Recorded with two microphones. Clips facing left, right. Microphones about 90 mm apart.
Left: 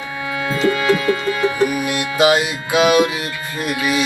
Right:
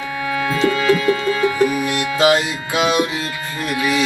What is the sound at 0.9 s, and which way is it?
Music, 20° left (ahead or behind).